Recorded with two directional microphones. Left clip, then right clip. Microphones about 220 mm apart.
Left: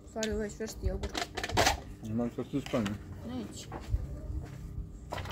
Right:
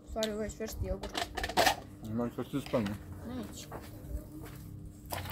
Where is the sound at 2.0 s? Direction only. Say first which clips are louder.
Left 1 dB; 15° right (ahead or behind).